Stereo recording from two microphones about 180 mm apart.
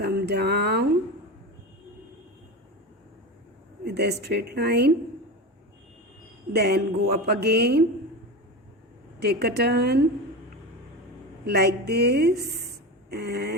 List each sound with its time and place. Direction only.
0.0 s a sound: 65° right (ahead or behind)
3.8 s speech: 65° right (ahead or behind)
6.5 s speech: 65° right (ahead or behind)
9.2 s speech: 65° right (ahead or behind)
11.4 s speech: 65° right (ahead or behind)